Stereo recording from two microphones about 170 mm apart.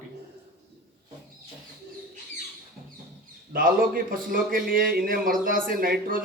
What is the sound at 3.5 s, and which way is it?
A man's voice, 60° right (ahead or behind).